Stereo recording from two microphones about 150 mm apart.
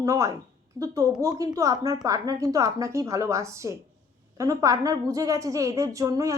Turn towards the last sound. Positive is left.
turn(degrees=-20)  # may be behind; listen again after turning